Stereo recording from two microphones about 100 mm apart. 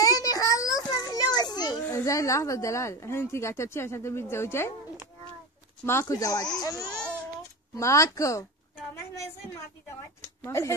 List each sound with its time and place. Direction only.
0.0 s children playing: 35° left (ahead or behind)
1.9 s speech: 30° left (ahead or behind)
5.9 s speech: 30° left (ahead or behind)
10.4 s speech: 30° left (ahead or behind)